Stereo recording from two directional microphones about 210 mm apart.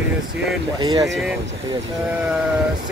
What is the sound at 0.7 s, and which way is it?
Speech, 20° right (ahead or behind).